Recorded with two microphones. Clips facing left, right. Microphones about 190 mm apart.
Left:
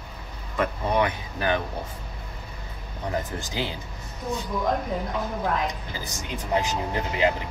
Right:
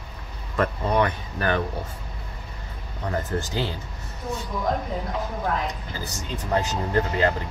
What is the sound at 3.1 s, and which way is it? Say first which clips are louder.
Speech: right 2 dB; 15° left (ahead or behind).